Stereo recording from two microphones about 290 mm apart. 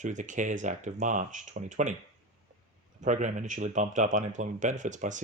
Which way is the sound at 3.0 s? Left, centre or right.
Right.